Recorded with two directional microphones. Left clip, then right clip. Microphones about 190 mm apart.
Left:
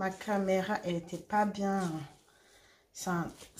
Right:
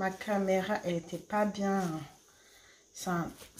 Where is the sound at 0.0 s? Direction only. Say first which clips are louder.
Right 1 dB; centre (ahead or behind).